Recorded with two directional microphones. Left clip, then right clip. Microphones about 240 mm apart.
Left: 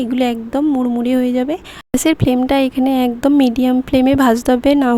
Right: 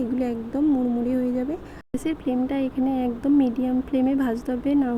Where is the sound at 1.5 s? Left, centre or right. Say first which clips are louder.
Left 10 dB; left.